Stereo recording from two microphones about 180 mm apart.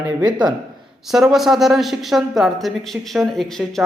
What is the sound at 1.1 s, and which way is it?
Speech, centre (ahead or behind).